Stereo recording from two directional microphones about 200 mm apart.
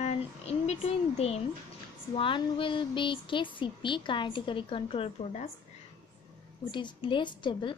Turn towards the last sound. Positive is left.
turn(degrees=25)  # may be behind; listen again after turning